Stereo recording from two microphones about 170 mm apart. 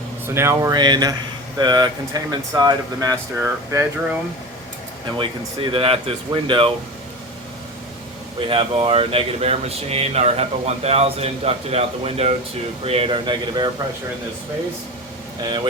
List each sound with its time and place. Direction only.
0.3 s speech: 15° right (ahead or behind)
5.1 s speech: 30° right (ahead or behind)
8.4 s speech: 30° right (ahead or behind)